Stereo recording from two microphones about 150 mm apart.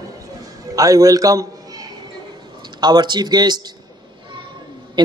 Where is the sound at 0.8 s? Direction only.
25° right (ahead or behind).